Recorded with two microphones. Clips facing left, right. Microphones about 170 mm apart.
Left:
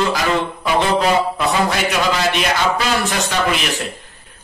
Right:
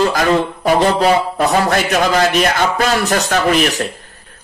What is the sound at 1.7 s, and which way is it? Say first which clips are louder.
A man's voice: right 4 dB; 50° right (ahead or behind).